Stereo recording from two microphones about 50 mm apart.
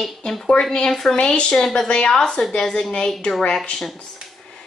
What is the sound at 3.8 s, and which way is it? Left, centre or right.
Speech, centre.